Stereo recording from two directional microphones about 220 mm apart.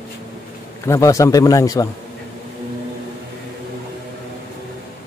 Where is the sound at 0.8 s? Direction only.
15° left (ahead or behind).